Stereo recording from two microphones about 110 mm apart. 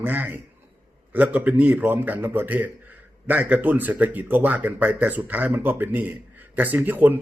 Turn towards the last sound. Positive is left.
turn(degrees=-15)  # may be behind; listen again after turning